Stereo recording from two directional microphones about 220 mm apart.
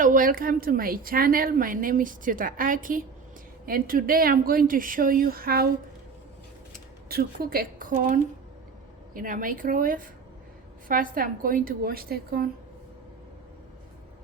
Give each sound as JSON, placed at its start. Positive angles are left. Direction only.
{"t": 0.0, "sound": "speech", "side_deg": -40}
{"t": 7.1, "sound": "speech", "side_deg": -45}